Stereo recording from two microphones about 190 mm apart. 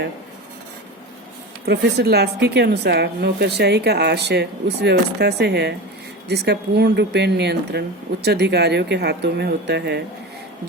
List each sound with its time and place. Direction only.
1.6 s speech: 60° right (ahead or behind)